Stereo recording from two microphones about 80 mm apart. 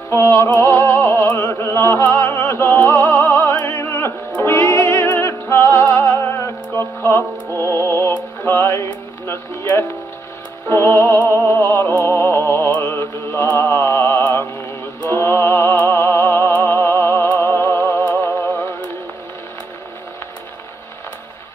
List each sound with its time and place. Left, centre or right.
0.1 s music: left
3.3 s opera: left
4.4 s music: left